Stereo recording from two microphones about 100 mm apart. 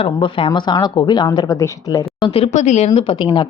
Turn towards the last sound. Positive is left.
turn(degrees=60)  # may be behind; listen again after turning